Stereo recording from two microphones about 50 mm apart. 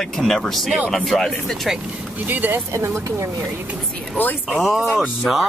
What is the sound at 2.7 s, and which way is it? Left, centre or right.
Speech, right.